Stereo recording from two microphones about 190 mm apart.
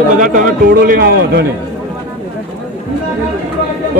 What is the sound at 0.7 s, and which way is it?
Speech, 55° right (ahead or behind).